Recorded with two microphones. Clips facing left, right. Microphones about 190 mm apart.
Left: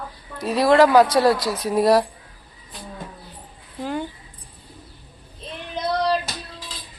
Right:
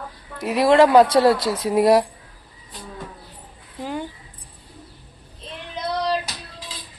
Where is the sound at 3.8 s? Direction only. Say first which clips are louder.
Left 2 dB; 10° right (ahead or behind).